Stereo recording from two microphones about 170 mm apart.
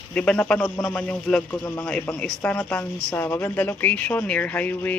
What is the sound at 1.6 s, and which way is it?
Speech, 15° left (ahead or behind).